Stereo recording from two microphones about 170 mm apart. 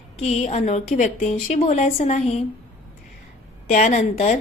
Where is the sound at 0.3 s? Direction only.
40° left (ahead or behind).